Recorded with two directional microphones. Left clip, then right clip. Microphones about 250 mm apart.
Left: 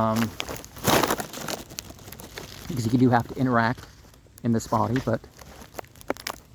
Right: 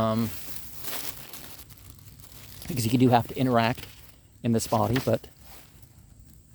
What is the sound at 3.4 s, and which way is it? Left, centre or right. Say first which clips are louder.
Speech: left 1 dB; right.